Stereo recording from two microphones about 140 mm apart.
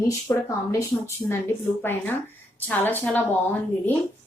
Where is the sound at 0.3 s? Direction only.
20° left (ahead or behind).